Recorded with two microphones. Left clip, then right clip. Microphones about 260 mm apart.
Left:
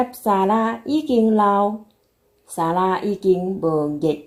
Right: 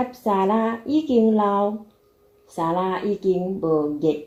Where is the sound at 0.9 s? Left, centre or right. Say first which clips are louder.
Even; centre.